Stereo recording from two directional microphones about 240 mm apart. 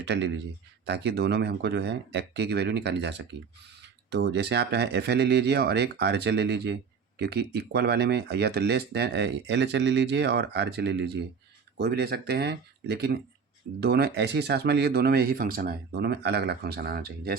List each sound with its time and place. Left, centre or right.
0.0 s a man's voice: right